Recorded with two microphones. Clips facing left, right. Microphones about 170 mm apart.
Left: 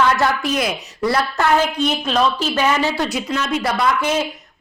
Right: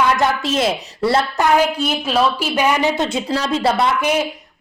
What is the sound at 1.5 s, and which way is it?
A woman's voice, 10° right (ahead or behind).